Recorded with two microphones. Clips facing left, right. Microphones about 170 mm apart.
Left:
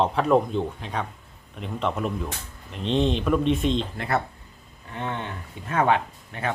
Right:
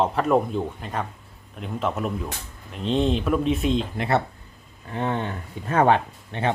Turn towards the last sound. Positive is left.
turn(degrees=-30)  # may be behind; listen again after turning